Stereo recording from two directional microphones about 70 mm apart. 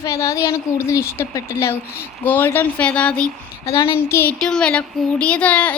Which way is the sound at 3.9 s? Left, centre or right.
Left.